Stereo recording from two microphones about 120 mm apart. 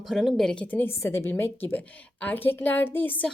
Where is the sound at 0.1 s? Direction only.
Centre (ahead or behind).